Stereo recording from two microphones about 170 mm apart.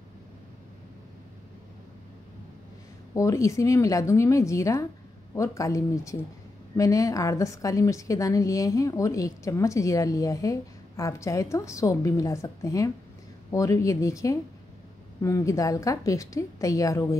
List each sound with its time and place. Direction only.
3.2 s a woman's voice: 20° left (ahead or behind)